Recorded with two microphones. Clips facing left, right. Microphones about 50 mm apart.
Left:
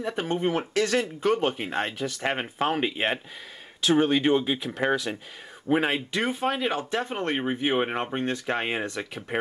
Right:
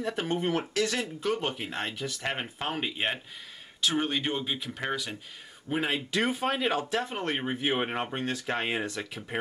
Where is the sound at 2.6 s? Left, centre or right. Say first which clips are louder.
Left 6 dB; centre.